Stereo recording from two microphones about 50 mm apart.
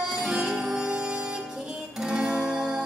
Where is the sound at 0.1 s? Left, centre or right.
Centre.